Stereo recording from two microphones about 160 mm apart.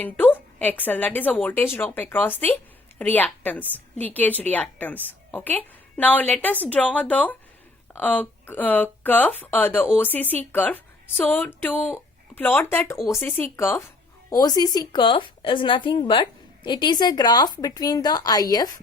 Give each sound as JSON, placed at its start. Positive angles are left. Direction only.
{"t": 0.0, "sound": "a woman's voice", "side_deg": 10}